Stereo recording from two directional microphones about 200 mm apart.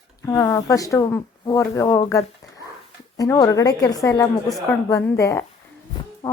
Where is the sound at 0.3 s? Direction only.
15° left (ahead or behind).